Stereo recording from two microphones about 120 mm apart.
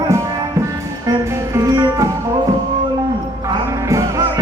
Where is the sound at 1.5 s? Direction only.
30° right (ahead or behind).